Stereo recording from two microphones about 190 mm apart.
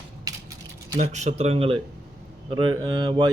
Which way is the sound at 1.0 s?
35° right (ahead or behind).